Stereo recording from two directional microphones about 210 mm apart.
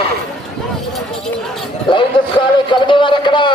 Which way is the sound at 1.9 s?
25° left (ahead or behind).